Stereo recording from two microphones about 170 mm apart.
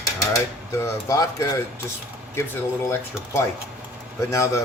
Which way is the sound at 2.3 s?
15° left (ahead or behind).